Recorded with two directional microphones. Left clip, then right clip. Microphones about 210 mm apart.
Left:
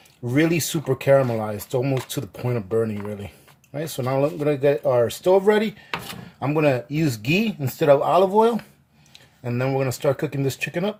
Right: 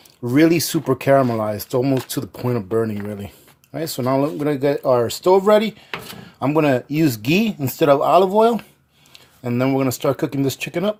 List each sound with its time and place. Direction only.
0.3 s speech: 35° right (ahead or behind)